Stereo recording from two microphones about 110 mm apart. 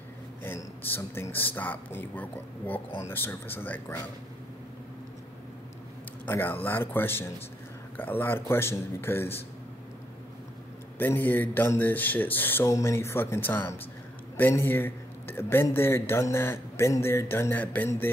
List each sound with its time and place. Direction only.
0.4 s a man's voice: 20° left (ahead or behind)
6.2 s a man's voice: 20° left (ahead or behind)
11.0 s a man's voice: 15° left (ahead or behind)